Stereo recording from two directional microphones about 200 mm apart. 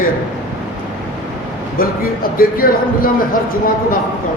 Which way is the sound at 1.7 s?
45° left (ahead or behind).